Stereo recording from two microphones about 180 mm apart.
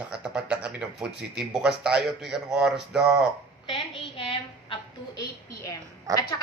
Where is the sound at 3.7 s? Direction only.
30° left (ahead or behind).